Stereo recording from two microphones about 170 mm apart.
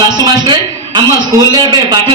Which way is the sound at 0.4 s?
25° right (ahead or behind).